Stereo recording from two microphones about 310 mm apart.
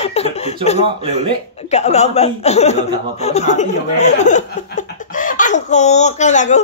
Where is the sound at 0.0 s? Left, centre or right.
Centre.